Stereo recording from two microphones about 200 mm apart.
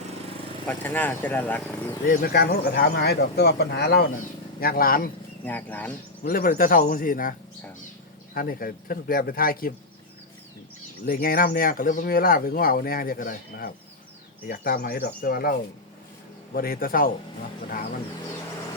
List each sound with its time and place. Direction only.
0.7 s speech: 10° left (ahead or behind)
2.0 s a man's voice: 50° left (ahead or behind)
5.5 s speech: 10° left (ahead or behind)
6.2 s speech: 45° left (ahead or behind)
11.0 s speech: 45° left (ahead or behind)